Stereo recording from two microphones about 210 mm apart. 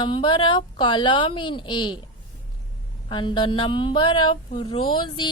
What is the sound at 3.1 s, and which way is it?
A woman's voice, 20° left (ahead or behind).